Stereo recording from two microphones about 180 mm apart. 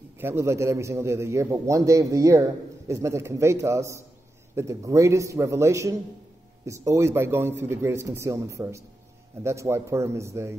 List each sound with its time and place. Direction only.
0.2 s a man's voice: 15° right (ahead or behind)